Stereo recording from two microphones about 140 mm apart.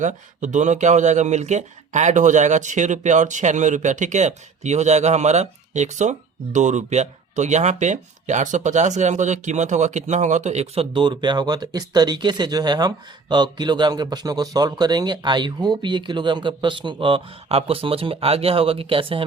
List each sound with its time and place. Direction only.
0.0 s speech: 60° right (ahead or behind)
10.9 s speech: 35° right (ahead or behind)